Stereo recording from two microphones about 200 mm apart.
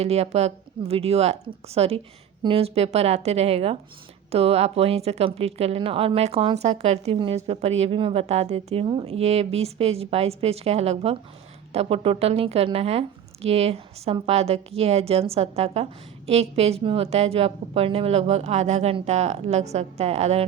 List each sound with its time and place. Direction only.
0.0 s speech: 30° right (ahead or behind)